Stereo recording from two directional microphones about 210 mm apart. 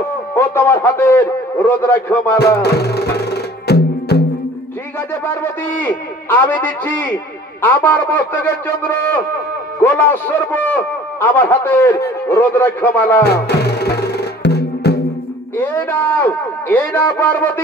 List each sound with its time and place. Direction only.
0.3 s a man's voice: 10° left (ahead or behind)
2.3 s music: 50° left (ahead or behind)
5.1 s a man's voice: 10° left (ahead or behind)
13.2 s music: 50° left (ahead or behind)
15.5 s a man's voice: 10° left (ahead or behind)